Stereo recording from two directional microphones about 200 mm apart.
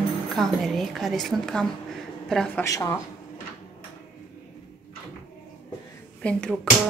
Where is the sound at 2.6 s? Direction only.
15° left (ahead or behind).